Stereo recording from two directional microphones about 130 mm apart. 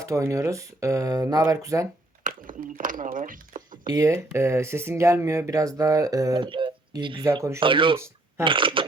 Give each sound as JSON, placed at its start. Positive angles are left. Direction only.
{"t": 0.0, "sound": "speech", "side_deg": -25}
{"t": 2.2, "sound": "a sound", "side_deg": -90}
{"t": 3.8, "sound": "speech", "side_deg": -25}
{"t": 6.4, "sound": "speech", "side_deg": -40}
{"t": 7.3, "sound": "speech", "side_deg": -25}
{"t": 7.6, "sound": "speech", "side_deg": -40}
{"t": 7.9, "sound": "shuffling cards", "side_deg": -20}
{"t": 8.4, "sound": "speech", "side_deg": -40}